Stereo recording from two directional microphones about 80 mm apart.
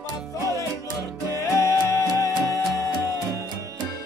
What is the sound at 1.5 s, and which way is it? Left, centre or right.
Music, left.